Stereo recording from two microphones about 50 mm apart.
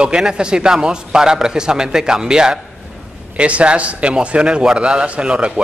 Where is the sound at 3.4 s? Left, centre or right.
Right.